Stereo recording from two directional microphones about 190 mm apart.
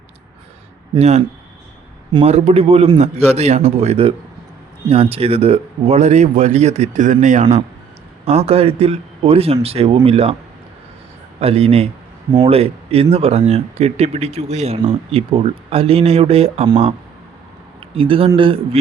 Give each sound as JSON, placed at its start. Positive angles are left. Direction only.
{"t": 0.9, "sound": "speech", "side_deg": -35}
{"t": 11.3, "sound": "speech", "side_deg": -30}
{"t": 17.9, "sound": "a man's voice", "side_deg": -30}